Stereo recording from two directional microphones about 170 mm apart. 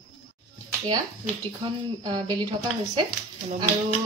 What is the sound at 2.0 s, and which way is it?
Speech, 25° right (ahead or behind).